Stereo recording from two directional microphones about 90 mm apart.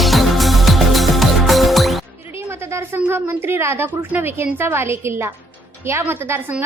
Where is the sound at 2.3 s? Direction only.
30° right (ahead or behind).